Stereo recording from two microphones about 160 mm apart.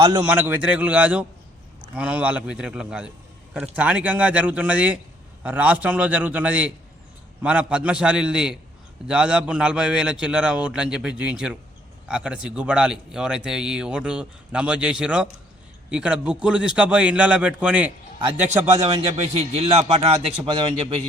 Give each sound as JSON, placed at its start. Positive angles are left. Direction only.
{"t": 0.0, "sound": "a man's voice", "side_deg": -30}
{"t": 0.3, "sound": "a man's voice", "side_deg": -10}
{"t": 18.3, "sound": "a man's voice", "side_deg": -45}
{"t": 18.7, "sound": "a man's voice", "side_deg": -30}
{"t": 19.1, "sound": "a man's voice", "side_deg": -40}